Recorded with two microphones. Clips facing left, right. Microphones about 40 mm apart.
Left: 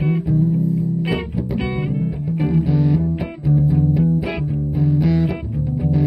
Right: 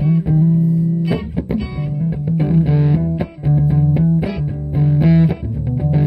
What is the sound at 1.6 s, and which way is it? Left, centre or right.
Music, left.